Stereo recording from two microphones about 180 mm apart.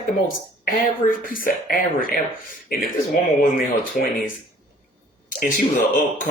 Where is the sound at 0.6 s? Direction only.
50° left (ahead or behind).